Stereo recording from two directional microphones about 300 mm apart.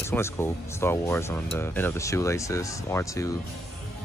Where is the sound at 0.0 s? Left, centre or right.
Centre.